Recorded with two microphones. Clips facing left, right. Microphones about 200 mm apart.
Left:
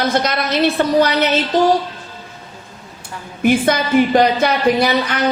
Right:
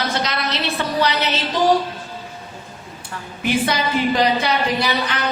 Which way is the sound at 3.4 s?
50° left (ahead or behind).